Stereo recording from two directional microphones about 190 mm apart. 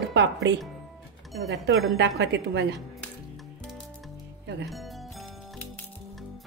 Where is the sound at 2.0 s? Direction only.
65° right (ahead or behind).